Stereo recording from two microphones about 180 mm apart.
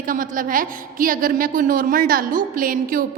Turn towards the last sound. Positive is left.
turn(degrees=-50)  # may be behind; listen again after turning